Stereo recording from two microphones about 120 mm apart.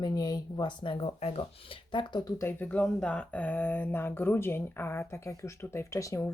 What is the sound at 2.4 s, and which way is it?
Speech, 15° left (ahead or behind).